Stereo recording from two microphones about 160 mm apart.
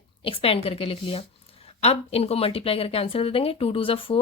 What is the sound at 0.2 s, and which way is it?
A woman's voice, 35° left (ahead or behind).